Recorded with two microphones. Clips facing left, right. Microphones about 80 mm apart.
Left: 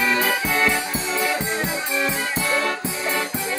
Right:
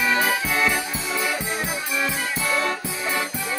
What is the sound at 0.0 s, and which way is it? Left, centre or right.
Music, right.